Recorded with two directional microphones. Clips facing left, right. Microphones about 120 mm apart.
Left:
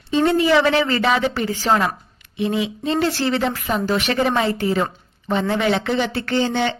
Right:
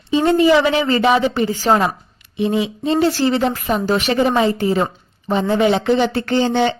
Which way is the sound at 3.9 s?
30° right (ahead or behind).